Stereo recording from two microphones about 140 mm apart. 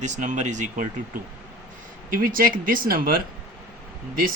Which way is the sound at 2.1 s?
90° right.